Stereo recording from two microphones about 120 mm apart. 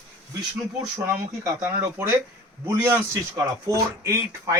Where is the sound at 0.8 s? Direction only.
25° right (ahead or behind).